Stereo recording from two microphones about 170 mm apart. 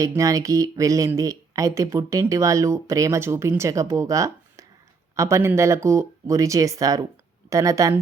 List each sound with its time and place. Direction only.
0.0 s a woman's voice: 20° right (ahead or behind)